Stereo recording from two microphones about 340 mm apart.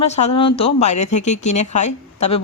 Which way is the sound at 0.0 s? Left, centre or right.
Centre.